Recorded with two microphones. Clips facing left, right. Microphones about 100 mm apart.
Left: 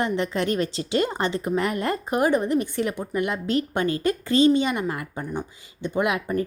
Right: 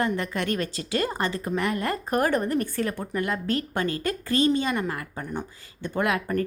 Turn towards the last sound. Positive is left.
turn(degrees=15)  # may be behind; listen again after turning